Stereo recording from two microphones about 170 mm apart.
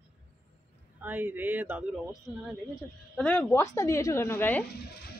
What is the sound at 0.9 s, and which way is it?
Speech, 10° right (ahead or behind).